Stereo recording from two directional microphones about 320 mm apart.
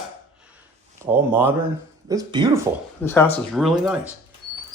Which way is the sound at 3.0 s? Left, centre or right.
Centre.